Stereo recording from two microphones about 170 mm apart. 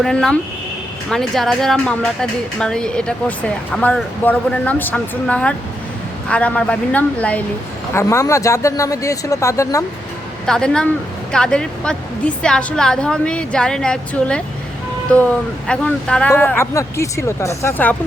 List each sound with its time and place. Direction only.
0.0 s a woman's voice: 5° left (ahead or behind)
7.9 s a man's voice: 20° left (ahead or behind)
10.4 s a woman's voice: 5° left (ahead or behind)